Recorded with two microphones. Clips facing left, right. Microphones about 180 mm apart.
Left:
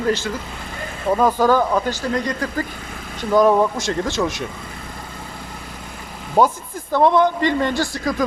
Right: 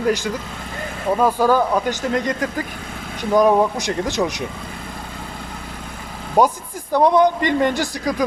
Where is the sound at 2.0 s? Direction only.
20° right (ahead or behind).